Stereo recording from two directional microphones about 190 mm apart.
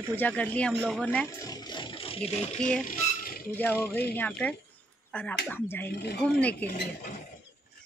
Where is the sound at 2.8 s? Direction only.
45° left (ahead or behind).